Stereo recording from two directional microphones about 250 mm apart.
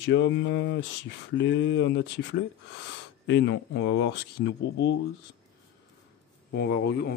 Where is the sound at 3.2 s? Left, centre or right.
Left.